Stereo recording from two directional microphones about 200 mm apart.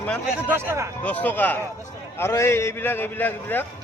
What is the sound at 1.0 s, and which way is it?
Speech, 10° left (ahead or behind).